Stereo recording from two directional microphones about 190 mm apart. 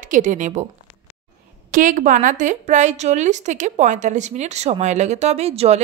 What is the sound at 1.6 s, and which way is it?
A woman's voice, 45° right (ahead or behind).